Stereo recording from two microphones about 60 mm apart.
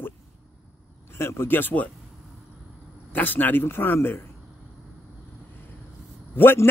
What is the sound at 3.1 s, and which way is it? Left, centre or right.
Speech, left.